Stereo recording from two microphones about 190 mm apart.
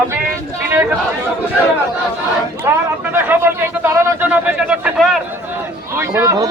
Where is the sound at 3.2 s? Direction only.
10° right (ahead or behind).